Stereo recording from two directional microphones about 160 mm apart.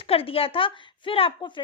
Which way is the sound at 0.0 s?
35° left (ahead or behind).